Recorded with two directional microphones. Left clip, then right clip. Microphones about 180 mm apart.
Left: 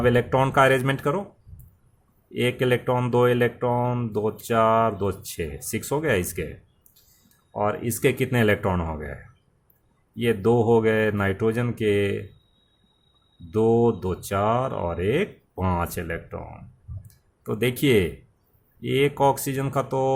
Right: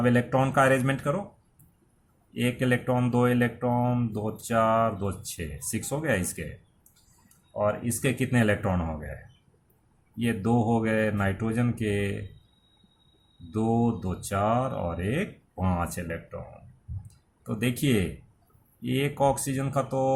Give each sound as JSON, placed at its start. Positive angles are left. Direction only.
{"t": 0.0, "sound": "speech", "side_deg": 45}
{"t": 2.3, "sound": "speech", "side_deg": 45}
{"t": 7.6, "sound": "speech", "side_deg": 50}
{"t": 10.2, "sound": "speech", "side_deg": 45}
{"t": 13.5, "sound": "speech", "side_deg": 45}
{"t": 17.4, "sound": "speech", "side_deg": 45}